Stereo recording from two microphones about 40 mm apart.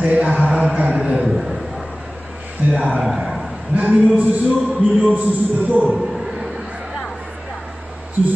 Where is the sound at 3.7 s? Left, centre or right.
Right.